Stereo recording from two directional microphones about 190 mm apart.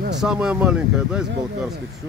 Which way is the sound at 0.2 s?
5° right (ahead or behind).